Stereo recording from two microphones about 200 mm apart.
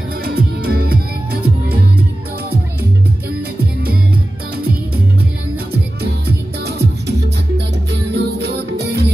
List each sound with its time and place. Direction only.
0.2 s music: 50° right (ahead or behind)
5.7 s music: 55° right (ahead or behind)